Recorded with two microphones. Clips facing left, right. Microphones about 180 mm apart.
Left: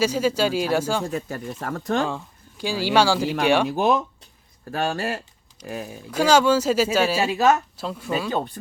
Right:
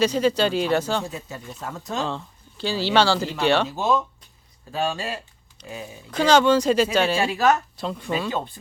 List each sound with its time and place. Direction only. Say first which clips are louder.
0.0 s speech: right 1 dB; 5° left (ahead or behind)
1.1 s speech: left 7 dB; 60° left (ahead or behind)
2.0 s speech: even; 10° left (ahead or behind)
3.7 s speech: left 3 dB; 70° left (ahead or behind)
4.7 s speech: left 1 dB; 55° left (ahead or behind)
6.1 s speech: even; 10° left (ahead or behind)
7.3 s speech: left 1 dB; 20° left (ahead or behind)
7.8 s speech: even; 5° left (ahead or behind)